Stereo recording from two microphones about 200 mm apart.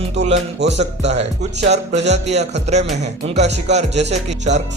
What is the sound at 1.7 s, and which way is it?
Music, 35° right (ahead or behind).